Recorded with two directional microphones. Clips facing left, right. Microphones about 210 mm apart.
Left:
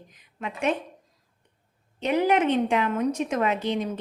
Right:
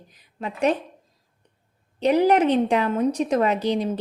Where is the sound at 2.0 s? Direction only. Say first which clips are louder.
Right 4 dB; 35° right (ahead or behind).